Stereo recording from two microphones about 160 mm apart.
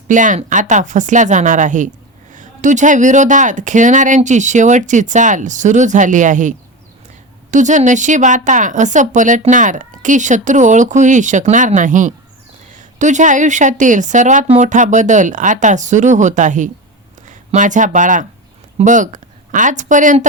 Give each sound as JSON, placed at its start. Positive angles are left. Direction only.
{"t": 0.1, "sound": "a woman's voice", "side_deg": -50}
{"t": 7.5, "sound": "a woman's voice", "side_deg": -50}